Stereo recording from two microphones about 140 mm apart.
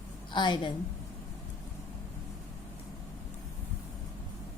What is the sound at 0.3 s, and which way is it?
Speech, 35° left (ahead or behind).